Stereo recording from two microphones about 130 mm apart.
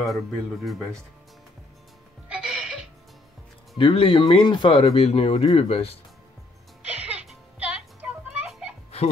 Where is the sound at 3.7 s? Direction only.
40° left (ahead or behind).